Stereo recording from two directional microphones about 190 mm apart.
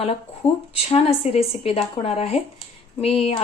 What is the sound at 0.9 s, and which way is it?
Speech, 30° left (ahead or behind).